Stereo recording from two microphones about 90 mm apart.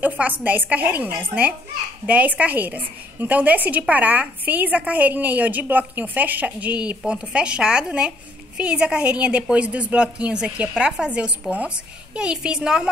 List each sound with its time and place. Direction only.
0.0 s a woman's voice: 15° right (ahead or behind)